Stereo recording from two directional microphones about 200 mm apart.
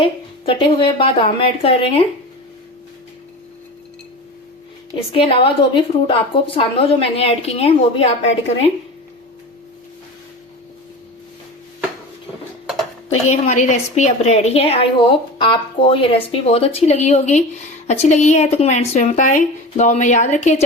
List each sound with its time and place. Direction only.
0.0 s a woman's voice: 25° left (ahead or behind)
4.9 s a woman's voice: 30° left (ahead or behind)
13.2 s a woman's voice: 35° left (ahead or behind)